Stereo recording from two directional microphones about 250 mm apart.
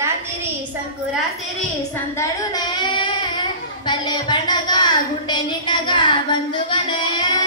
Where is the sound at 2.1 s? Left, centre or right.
Centre.